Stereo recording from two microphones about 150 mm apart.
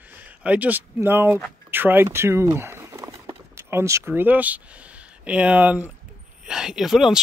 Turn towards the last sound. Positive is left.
turn(degrees=-5)  # may be behind; listen again after turning